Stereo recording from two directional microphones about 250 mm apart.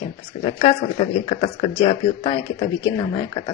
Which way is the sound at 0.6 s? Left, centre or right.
Left.